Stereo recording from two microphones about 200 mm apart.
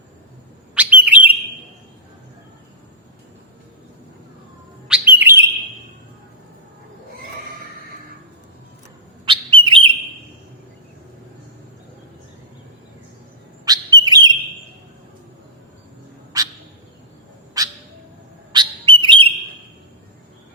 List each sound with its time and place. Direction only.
0.8 s bird: 5° right (ahead or behind)
4.9 s bird: 10° right (ahead or behind)
9.2 s bird: 25° right (ahead or behind)
13.7 s bird: 20° right (ahead or behind)
16.3 s bird: 15° right (ahead or behind)
17.6 s bird: 20° right (ahead or behind)